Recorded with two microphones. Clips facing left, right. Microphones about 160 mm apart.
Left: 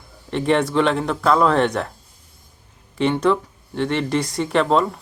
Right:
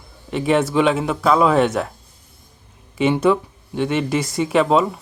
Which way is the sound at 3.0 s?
5° right (ahead or behind).